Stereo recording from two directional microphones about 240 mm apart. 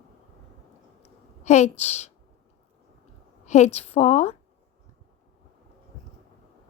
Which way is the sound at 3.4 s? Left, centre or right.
Left.